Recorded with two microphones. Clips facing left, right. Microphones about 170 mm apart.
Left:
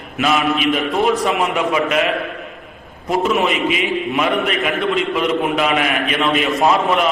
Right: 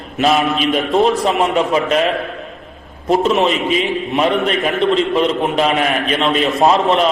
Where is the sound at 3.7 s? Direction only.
35° right (ahead or behind).